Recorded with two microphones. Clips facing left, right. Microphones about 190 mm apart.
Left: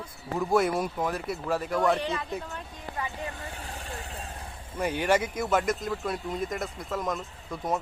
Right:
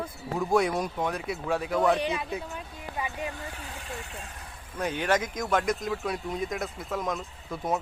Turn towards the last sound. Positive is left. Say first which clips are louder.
# right 1 dB
turn(degrees=0)  # may be behind; listen again after turning